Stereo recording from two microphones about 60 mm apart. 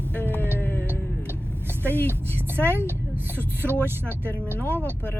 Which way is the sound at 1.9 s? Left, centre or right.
Left.